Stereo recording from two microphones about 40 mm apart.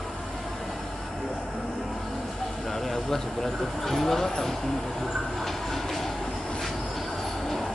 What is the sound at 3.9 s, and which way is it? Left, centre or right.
Speech, centre.